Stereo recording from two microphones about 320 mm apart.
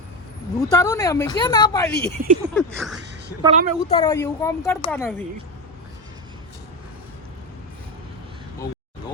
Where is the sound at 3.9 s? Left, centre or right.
Centre.